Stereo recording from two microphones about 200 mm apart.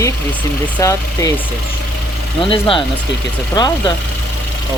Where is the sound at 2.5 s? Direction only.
25° left (ahead or behind).